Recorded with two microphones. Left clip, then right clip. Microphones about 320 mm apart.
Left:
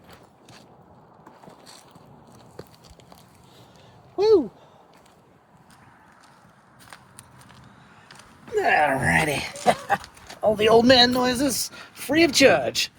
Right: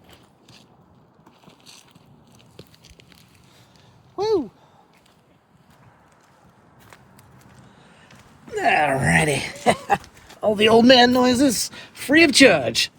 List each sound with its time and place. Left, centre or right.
1.5 s mechanisms: centre
8.5 s a sound: right
10.4 s a man's voice: right